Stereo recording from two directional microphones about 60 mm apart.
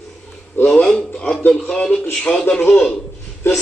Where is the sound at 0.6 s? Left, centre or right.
Centre.